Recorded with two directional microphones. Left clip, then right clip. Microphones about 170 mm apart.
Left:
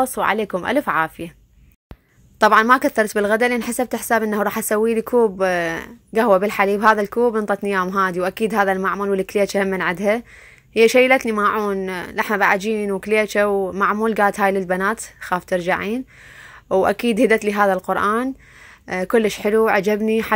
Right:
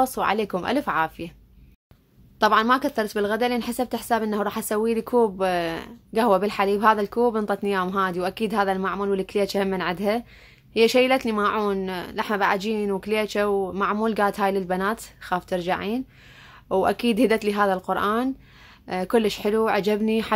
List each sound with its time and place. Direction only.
0.0 s speech: 15° left (ahead or behind)
2.4 s speech: 20° left (ahead or behind)
19.4 s speech: 20° left (ahead or behind)